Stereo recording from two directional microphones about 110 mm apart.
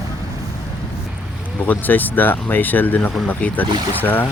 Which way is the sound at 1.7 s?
15° left (ahead or behind).